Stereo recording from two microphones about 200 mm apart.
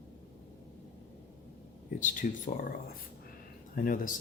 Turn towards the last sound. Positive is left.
turn(degrees=45)  # may be behind; listen again after turning